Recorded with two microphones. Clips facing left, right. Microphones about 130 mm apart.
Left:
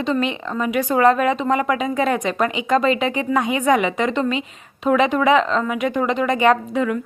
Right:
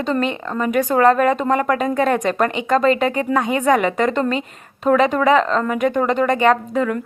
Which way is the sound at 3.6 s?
10° left (ahead or behind).